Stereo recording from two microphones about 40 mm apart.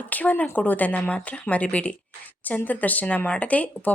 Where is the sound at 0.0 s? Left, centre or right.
Left.